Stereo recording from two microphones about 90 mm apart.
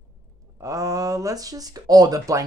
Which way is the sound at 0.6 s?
40° right (ahead or behind).